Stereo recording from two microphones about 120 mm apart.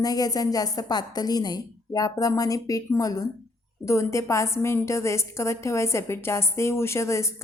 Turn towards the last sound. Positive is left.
turn(degrees=25)  # may be behind; listen again after turning